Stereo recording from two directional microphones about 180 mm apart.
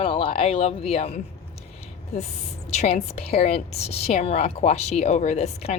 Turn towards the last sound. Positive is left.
turn(degrees=35)  # may be behind; listen again after turning